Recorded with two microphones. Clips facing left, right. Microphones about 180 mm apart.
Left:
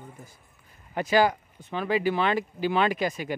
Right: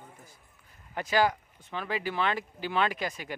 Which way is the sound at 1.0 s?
15° left (ahead or behind).